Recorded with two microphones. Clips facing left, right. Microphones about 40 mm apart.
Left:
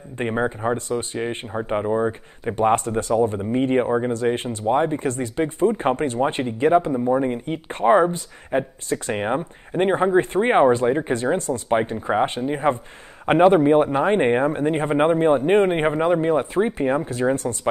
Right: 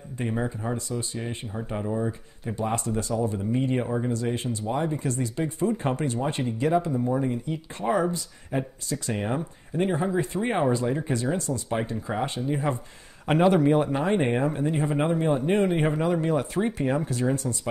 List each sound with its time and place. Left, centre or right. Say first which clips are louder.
0.2 s speech: left 7 dB; left